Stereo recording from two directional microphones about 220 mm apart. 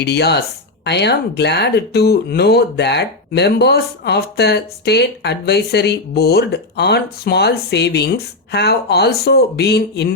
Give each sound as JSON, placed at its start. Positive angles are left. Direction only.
{"t": 0.0, "sound": "speech", "side_deg": 50}